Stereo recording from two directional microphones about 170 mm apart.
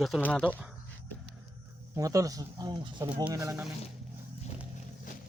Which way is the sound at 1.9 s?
20° right (ahead or behind).